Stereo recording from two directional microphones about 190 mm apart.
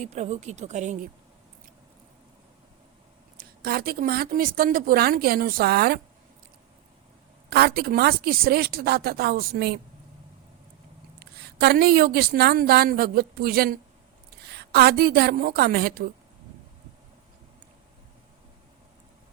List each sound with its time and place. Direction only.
0.0 s speech: 35° right (ahead or behind)
3.3 s speech: 50° right (ahead or behind)
7.5 s speech: 55° right (ahead or behind)
11.2 s a woman's voice: 60° right (ahead or behind)